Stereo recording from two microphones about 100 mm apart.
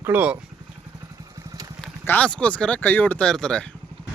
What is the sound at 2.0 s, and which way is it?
Speech, 15° left (ahead or behind).